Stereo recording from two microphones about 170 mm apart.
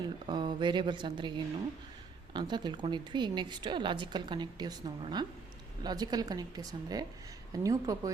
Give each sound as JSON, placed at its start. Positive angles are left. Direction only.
{"t": 0.3, "sound": "a woman's voice", "side_deg": -25}